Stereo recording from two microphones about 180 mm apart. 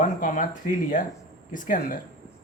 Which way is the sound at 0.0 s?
45° left (ahead or behind).